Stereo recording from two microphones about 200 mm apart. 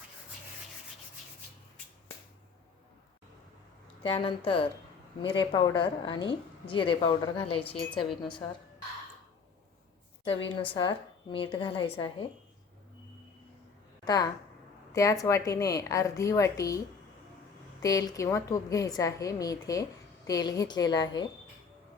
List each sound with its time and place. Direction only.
4.0 s a woman's voice: 25° left (ahead or behind)
10.7 s a woman's voice: 25° left (ahead or behind)
14.0 s a woman's voice: 20° left (ahead or behind)
17.8 s a woman's voice: 15° left (ahead or behind)